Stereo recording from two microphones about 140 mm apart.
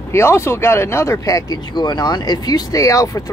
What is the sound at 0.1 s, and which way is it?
Speech, 20° left (ahead or behind).